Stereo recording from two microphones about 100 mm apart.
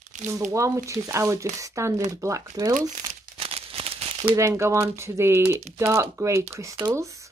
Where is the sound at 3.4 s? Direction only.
75° right (ahead or behind).